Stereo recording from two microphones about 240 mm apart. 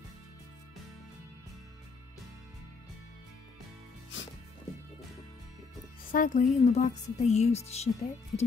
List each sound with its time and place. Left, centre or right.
6.1 s a woman's voice: left